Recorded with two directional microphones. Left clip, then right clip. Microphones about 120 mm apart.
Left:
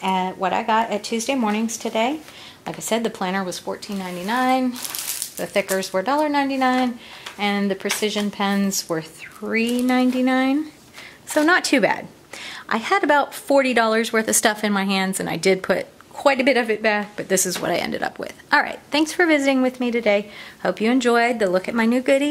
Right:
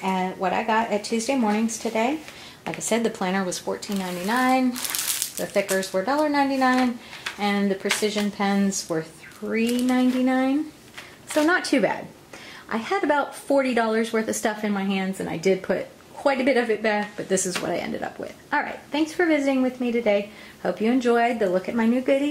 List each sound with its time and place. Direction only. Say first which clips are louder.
0.0 s speech: left 3 dB; 25° left (ahead or behind)
5.8 s speech: left 2 dB; 25° left (ahead or behind)
17.6 s speech: left 5 dB; 40° left (ahead or behind)